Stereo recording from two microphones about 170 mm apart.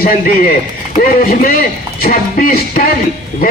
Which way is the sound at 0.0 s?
60° left (ahead or behind).